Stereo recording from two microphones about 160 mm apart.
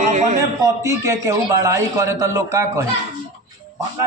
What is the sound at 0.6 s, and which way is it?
A man's voice, 20° right (ahead or behind).